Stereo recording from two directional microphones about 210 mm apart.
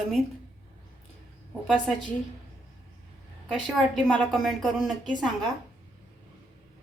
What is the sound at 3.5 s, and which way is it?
A woman's voice, centre (ahead or behind).